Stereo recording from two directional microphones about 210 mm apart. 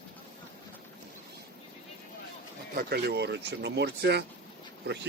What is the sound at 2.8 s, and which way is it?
Speech, 50° right (ahead or behind).